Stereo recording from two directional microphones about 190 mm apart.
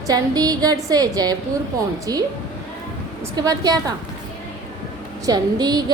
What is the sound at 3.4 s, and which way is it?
Speech, 20° right (ahead or behind).